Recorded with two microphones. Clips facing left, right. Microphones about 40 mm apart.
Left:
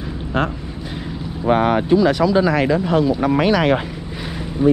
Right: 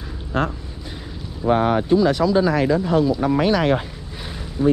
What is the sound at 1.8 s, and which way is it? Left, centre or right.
Speech, left.